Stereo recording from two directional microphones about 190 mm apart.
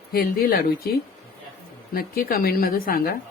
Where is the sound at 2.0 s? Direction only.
50° left (ahead or behind).